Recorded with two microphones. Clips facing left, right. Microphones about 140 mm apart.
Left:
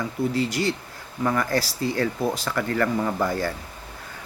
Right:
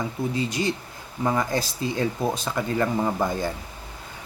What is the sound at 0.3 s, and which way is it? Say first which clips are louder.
Speech: left 2 dB; 20° right (ahead or behind).